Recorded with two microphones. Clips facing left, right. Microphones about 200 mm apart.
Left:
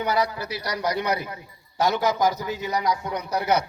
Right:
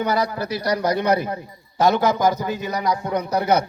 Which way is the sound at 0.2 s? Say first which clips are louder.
Right 3 dB; 50° right (ahead or behind).